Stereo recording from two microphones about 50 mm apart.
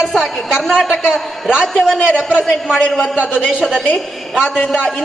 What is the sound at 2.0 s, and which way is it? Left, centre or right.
Speech, centre.